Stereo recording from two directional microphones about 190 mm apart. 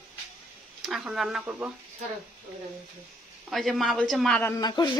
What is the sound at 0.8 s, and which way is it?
Speech, 5° right (ahead or behind).